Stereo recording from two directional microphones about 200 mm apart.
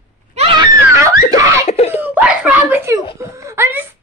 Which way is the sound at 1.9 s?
10° right (ahead or behind).